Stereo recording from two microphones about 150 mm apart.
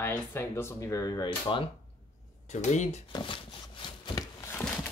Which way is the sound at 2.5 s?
50° left (ahead or behind).